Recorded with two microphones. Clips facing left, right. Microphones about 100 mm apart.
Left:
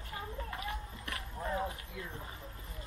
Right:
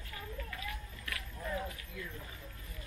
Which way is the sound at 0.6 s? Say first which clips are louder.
Left 3 dB; 25° left (ahead or behind).